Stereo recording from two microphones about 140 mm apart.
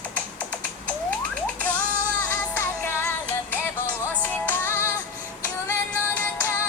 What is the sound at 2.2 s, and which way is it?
Music, 15° left (ahead or behind).